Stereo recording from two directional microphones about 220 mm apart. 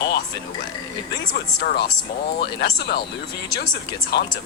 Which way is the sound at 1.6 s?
45° left (ahead or behind).